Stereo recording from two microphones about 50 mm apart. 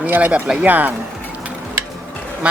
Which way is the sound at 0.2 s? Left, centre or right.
Right.